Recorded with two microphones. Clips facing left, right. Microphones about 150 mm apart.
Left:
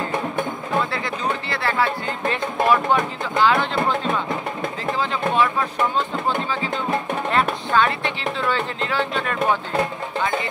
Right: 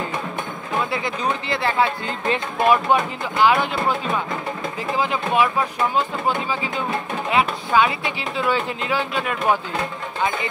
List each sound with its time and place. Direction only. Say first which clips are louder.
0.9 s speech: right 1 dB; 20° right (ahead or behind)
4.9 s speech: right 1 dB; 15° right (ahead or behind)